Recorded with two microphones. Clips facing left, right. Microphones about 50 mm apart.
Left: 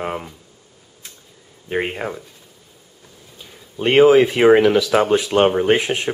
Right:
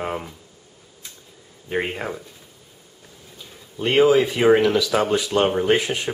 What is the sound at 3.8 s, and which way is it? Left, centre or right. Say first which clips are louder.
Speech: left 5 dB; left.